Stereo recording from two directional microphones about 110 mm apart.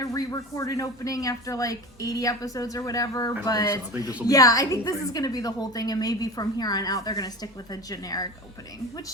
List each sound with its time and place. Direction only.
0.0 s a woman's voice: 30° left (ahead or behind)